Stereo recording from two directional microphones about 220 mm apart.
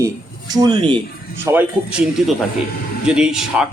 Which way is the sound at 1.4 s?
5° right (ahead or behind).